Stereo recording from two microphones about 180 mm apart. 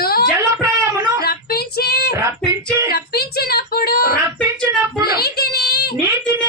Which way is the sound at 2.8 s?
60° left (ahead or behind).